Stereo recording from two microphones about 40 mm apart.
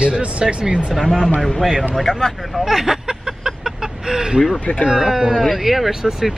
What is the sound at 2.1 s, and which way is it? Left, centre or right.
Speech, centre.